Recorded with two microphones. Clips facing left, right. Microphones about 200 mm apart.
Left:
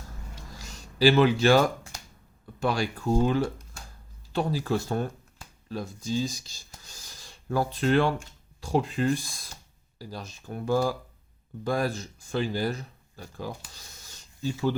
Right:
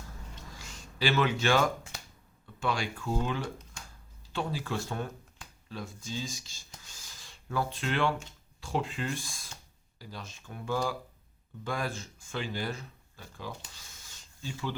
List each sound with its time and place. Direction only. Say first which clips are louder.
0.9 s speech: left 8 dB; 35° left (ahead or behind)